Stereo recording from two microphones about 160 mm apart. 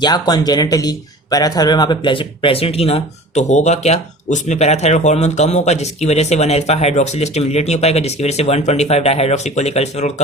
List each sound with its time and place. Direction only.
0.0 s speech: 25° left (ahead or behind); by 10.1 s 45° left (ahead or behind)